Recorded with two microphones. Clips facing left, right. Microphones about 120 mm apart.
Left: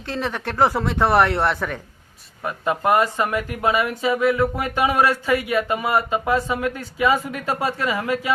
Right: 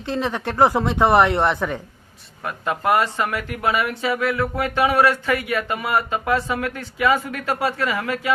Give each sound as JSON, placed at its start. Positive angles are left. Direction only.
{"t": 0.0, "sound": "speech", "side_deg": -15}
{"t": 2.4, "sound": "speech", "side_deg": 20}